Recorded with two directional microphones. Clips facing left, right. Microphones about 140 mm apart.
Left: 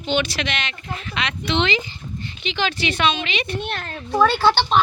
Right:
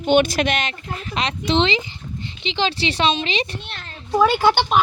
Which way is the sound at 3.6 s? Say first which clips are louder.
Left 9 dB; 55° left (ahead or behind).